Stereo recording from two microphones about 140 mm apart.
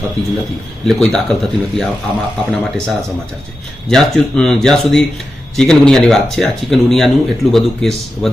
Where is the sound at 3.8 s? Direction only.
5° left (ahead or behind).